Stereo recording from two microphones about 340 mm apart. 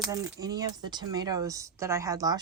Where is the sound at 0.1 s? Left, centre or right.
Centre.